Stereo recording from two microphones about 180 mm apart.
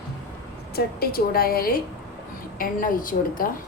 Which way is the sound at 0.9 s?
55° left (ahead or behind).